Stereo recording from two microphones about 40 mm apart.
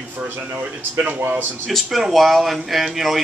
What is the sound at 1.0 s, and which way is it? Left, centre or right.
Speech, right.